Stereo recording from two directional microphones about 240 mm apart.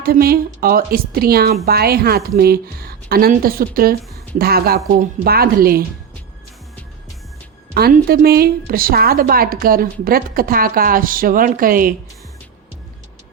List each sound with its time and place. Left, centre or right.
0.0 s a woman's voice: right
7.7 s a woman's voice: right